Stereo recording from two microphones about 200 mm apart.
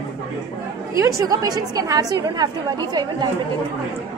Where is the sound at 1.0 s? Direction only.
15° right (ahead or behind).